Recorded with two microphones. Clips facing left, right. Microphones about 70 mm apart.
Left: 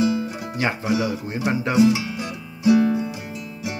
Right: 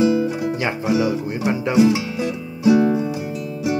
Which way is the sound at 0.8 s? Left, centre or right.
Right.